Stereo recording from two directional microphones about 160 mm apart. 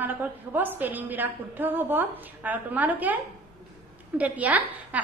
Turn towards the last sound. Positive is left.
turn(degrees=-10)  # may be behind; listen again after turning